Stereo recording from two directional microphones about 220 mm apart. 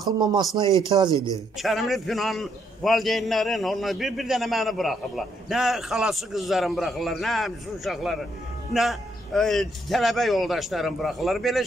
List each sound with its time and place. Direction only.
0.2 s speech: 20° right (ahead or behind)
1.1 s a man's voice: 15° left (ahead or behind)
1.6 s a man's voice: centre (ahead or behind)